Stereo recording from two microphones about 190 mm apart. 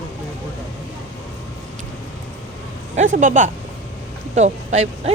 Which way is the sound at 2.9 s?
45° right (ahead or behind).